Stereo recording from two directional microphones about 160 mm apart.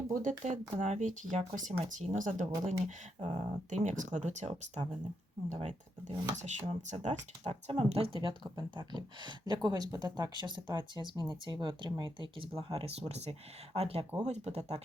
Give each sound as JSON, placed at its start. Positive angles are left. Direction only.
{"t": 0.1, "sound": "speech", "side_deg": -55}